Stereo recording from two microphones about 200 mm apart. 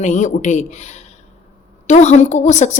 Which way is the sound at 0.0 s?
35° left (ahead or behind).